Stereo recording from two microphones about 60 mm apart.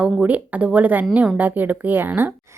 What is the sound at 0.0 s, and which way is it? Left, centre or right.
A woman's voice, right.